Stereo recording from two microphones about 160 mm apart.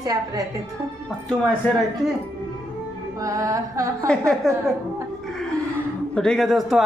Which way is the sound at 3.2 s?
20° right (ahead or behind).